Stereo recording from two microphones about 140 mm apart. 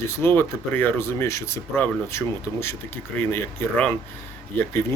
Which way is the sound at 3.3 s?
15° left (ahead or behind).